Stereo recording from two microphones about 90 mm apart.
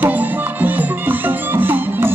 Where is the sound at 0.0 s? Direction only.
20° right (ahead or behind).